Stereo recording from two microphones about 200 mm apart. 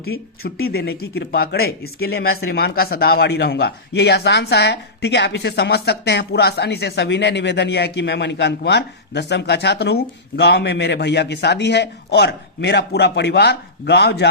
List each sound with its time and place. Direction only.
0.0 s speech: 50° left (ahead or behind)